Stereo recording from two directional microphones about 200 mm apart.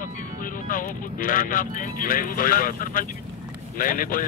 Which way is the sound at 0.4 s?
45° left (ahead or behind).